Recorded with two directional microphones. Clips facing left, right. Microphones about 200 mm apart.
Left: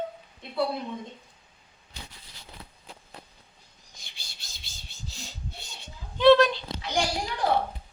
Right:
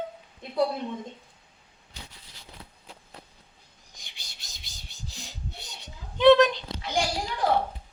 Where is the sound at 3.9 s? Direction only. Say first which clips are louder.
Even; 15° right (ahead or behind).